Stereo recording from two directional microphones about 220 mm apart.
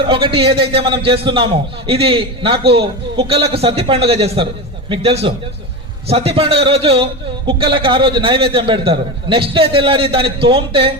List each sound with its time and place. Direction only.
0.1 s a man's voice: 25° right (ahead or behind)